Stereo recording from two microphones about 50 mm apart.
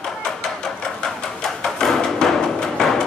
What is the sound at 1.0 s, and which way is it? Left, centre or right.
Music, centre.